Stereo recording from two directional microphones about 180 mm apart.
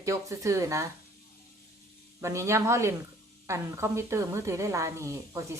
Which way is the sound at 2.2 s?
15° right (ahead or behind).